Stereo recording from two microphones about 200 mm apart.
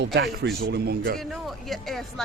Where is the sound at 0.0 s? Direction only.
55° right (ahead or behind).